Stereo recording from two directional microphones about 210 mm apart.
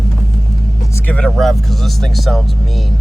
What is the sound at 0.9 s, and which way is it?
Speech, 5° left (ahead or behind).